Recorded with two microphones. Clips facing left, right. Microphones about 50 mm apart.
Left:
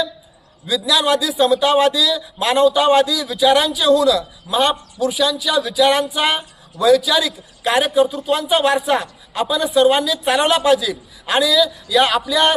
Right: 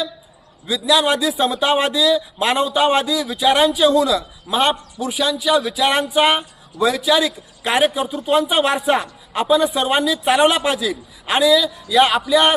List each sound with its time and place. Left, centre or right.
0.7 s a man's voice: right